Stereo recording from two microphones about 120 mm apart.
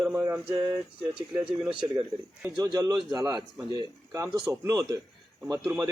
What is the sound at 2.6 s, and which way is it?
Speech, 30° right (ahead or behind).